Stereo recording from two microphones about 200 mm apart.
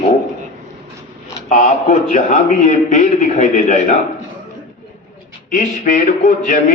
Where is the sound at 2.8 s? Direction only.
35° left (ahead or behind).